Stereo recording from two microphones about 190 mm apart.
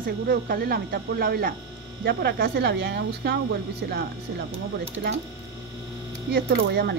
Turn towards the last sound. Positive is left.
turn(degrees=-60)  # may be behind; listen again after turning